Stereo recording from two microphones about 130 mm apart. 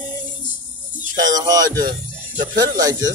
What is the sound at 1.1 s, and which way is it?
Speech, 30° right (ahead or behind).